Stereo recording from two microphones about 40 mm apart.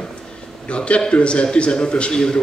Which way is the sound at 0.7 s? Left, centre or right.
Left.